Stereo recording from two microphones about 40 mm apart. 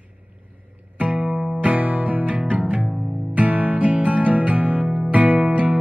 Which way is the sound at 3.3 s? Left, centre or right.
Right.